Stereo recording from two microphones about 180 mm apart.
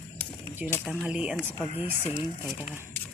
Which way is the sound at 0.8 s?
5° right (ahead or behind).